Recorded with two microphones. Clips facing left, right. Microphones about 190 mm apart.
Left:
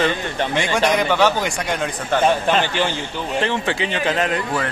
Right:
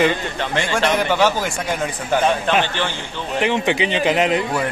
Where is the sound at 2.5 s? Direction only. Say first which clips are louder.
Even; 10° left (ahead or behind).